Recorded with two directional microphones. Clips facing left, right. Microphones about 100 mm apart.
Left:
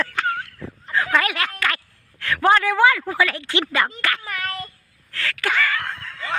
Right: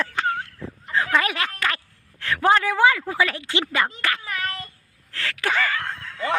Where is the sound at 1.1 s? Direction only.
25° right (ahead or behind).